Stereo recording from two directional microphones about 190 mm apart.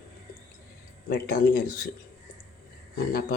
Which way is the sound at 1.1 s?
55° left (ahead or behind).